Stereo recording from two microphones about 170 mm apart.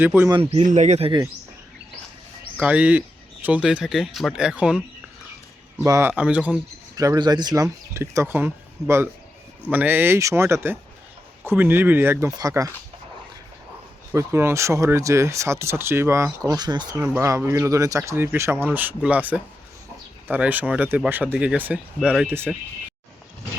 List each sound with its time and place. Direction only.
0.0 s speech: 10° right (ahead or behind)
0.3 s speech: 30° right (ahead or behind)
0.6 s speech: 45° right (ahead or behind)
2.6 s speech: 5° right (ahead or behind)
5.8 s speech: 15° right (ahead or behind)
6.9 s speech: 20° right (ahead or behind)
14.1 s speech: 15° right (ahead or behind)